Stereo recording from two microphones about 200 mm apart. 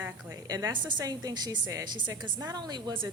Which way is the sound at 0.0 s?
15° right (ahead or behind).